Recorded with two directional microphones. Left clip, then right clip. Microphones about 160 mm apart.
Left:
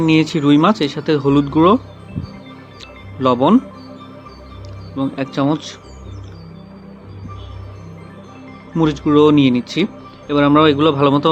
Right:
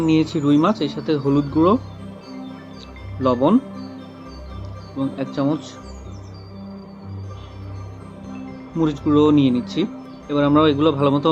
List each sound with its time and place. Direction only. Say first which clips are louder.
0.0 s speech: left 4 dB; 55° left (ahead or behind)
3.2 s speech: left 4 dB; 60° left (ahead or behind)
4.9 s speech: left 4 dB; 55° left (ahead or behind)
8.8 s speech: left 5 dB; 50° left (ahead or behind)